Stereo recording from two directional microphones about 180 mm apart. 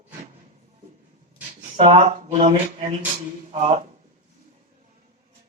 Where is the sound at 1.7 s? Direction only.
35° right (ahead or behind).